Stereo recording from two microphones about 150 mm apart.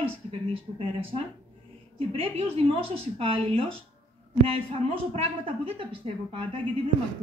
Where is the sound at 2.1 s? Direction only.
40° right (ahead or behind).